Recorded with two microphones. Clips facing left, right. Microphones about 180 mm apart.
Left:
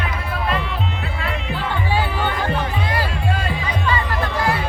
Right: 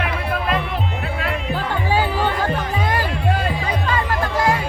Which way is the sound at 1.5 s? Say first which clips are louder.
Right 1 dB; 40° right (ahead or behind).